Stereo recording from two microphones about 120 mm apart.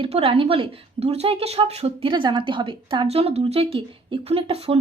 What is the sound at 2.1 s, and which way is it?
A woman's voice, 40° right (ahead or behind).